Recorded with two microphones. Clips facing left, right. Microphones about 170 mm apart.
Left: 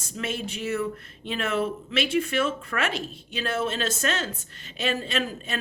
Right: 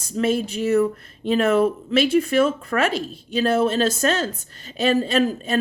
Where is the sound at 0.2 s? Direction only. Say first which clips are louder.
Right 10 dB; 40° right (ahead or behind).